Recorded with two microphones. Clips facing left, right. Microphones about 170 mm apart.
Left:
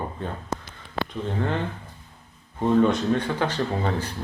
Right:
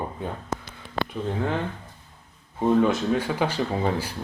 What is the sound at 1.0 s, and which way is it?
Speech, 5° right (ahead or behind).